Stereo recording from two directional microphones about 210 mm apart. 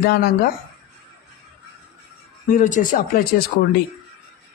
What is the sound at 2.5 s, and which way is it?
Speech, 40° left (ahead or behind).